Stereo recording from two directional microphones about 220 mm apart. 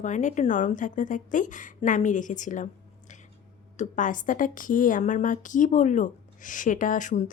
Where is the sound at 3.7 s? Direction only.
35° left (ahead or behind).